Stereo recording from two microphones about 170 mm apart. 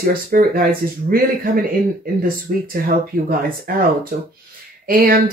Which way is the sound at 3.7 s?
60° right (ahead or behind).